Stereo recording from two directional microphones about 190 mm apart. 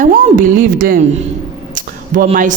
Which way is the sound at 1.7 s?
40° right (ahead or behind).